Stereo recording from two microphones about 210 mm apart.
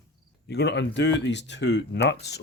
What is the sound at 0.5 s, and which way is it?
Speech, 55° left (ahead or behind).